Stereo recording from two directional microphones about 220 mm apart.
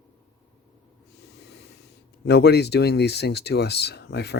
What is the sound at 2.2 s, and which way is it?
Speech, 50° left (ahead or behind).